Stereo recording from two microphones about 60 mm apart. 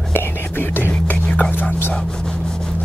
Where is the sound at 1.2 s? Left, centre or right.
Centre.